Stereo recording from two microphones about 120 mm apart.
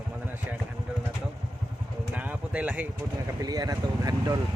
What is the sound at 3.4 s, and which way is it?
Speech, 35° right (ahead or behind).